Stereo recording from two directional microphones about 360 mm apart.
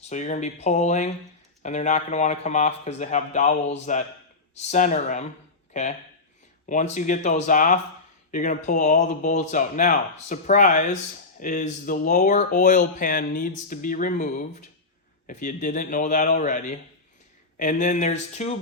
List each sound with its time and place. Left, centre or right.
0.0 s speech: centre